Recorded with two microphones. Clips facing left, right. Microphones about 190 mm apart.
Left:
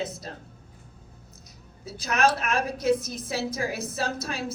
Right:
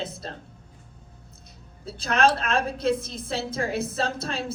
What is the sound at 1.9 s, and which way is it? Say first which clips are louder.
A woman's voice: right 2 dB; 30° right (ahead or behind).